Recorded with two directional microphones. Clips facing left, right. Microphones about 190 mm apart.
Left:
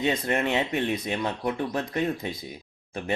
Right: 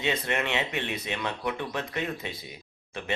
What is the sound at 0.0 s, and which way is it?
Speech, 40° left (ahead or behind).